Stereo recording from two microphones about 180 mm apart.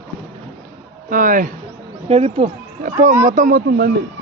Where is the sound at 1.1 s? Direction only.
50° right (ahead or behind).